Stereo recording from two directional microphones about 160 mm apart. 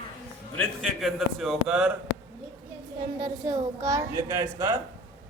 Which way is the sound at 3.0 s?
25° right (ahead or behind).